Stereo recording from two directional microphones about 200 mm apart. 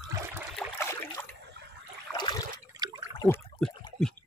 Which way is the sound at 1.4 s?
60° right (ahead or behind).